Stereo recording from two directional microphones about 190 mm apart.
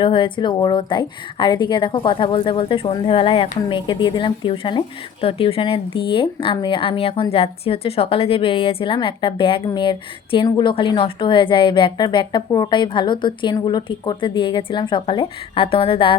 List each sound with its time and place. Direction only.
0.0 s speech: 25° left (ahead or behind)